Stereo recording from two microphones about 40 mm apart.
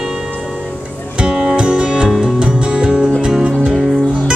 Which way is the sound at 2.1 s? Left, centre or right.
Centre.